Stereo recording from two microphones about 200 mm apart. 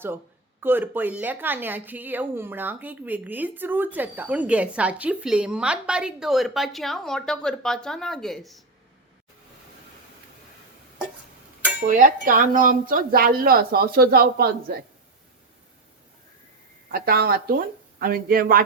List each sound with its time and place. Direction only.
0.6 s speech: 10° right (ahead or behind)
11.9 s speech: 45° right (ahead or behind)
16.9 s speech: 50° right (ahead or behind)